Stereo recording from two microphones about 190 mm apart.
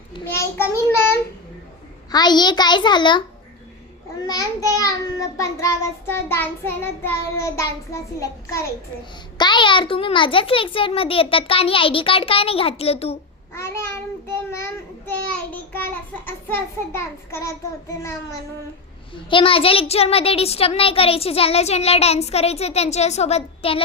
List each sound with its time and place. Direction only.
0.3 s a child's voice: 15° left (ahead or behind)
2.1 s a child's voice: 20° left (ahead or behind)
4.2 s child singing: 20° left (ahead or behind)
9.4 s a child's voice: 25° left (ahead or behind)
13.5 s child singing: 15° left (ahead or behind)
19.1 s a child's voice: 25° left (ahead or behind)